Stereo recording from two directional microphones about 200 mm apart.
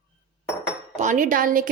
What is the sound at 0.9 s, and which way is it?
Speech, 40° right (ahead or behind).